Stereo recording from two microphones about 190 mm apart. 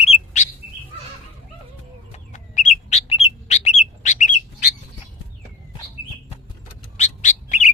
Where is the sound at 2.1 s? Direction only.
40° left (ahead or behind).